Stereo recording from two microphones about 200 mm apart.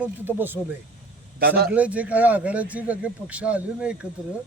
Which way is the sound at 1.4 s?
50° right (ahead or behind).